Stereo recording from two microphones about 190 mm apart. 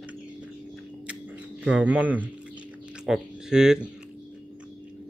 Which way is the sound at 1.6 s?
5° right (ahead or behind).